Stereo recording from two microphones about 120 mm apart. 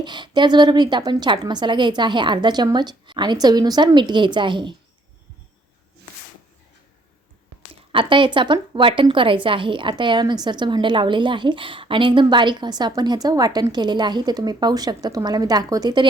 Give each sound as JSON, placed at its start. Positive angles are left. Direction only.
{"t": 0.0, "sound": "a woman's voice", "side_deg": -40}
{"t": 7.9, "sound": "a woman's voice", "side_deg": -45}